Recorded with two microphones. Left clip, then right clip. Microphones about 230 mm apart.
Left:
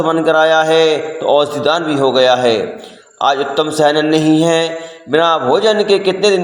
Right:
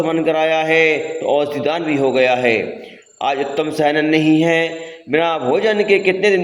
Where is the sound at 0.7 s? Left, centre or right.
Left.